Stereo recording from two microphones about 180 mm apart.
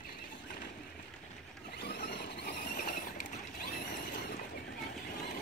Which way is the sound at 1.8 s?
65° left (ahead or behind).